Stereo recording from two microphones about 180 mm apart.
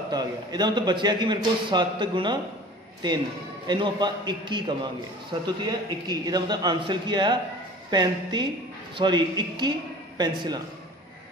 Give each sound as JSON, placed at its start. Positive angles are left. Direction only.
{"t": 0.1, "sound": "a man's voice", "side_deg": -20}
{"t": 3.6, "sound": "a man's voice", "side_deg": -25}